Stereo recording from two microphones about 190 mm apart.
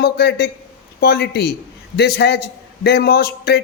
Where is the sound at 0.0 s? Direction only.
60° left (ahead or behind).